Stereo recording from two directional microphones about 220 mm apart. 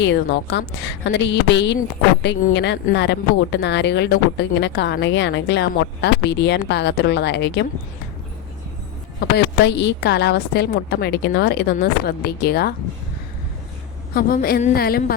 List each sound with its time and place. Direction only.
0.0 s speech: 50° left (ahead or behind)
9.3 s speech: 50° left (ahead or behind)
14.1 s speech: 40° left (ahead or behind)